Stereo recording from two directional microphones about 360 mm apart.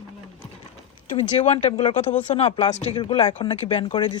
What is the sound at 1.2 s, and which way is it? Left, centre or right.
Speech, centre.